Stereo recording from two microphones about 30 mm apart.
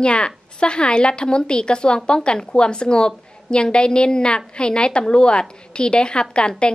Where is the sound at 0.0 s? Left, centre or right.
Left.